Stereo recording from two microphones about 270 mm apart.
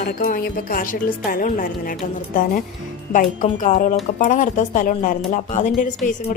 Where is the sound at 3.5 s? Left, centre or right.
Left.